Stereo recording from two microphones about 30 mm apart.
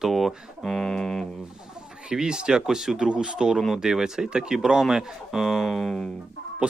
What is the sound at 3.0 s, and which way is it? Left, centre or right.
Speech, right.